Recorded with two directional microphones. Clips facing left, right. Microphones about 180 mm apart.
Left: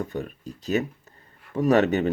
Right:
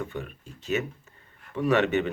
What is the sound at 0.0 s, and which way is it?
Speech, 40° left (ahead or behind).